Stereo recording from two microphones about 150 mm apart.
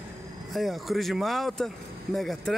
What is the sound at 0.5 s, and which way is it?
Speech, centre (ahead or behind).